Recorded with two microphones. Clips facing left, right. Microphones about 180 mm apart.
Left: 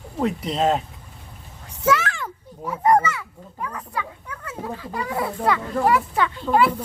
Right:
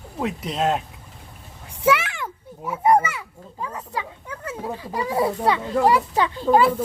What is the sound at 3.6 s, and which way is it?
Speech, 20° right (ahead or behind).